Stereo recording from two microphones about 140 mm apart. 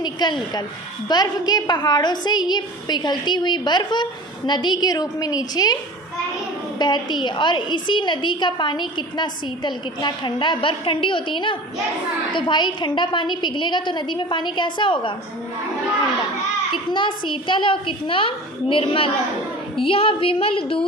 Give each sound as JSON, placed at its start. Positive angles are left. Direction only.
{"t": 0.0, "sound": "a sound", "side_deg": 30}
{"t": 1.0, "sound": "a woman's voice", "side_deg": 30}
{"t": 6.7, "sound": "a woman's voice", "side_deg": 30}
{"t": 16.9, "sound": "a woman's voice", "side_deg": 35}